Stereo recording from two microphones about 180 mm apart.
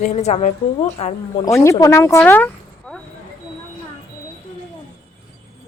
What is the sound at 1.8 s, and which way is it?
Speech, 15° left (ahead or behind).